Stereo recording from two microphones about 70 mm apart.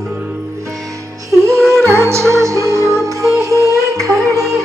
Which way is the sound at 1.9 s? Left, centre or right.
Right.